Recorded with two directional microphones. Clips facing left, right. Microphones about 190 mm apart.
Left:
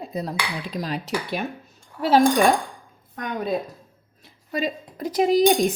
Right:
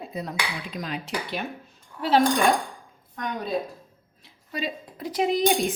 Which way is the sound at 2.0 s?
45° left (ahead or behind).